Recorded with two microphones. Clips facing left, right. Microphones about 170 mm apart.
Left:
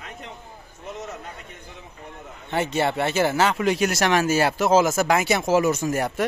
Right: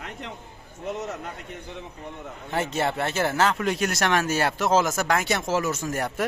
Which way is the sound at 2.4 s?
Centre (ahead or behind).